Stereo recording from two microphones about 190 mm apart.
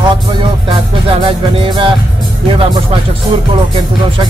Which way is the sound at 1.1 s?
25° right (ahead or behind).